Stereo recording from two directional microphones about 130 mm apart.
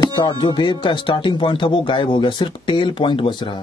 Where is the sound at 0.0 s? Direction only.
35° left (ahead or behind).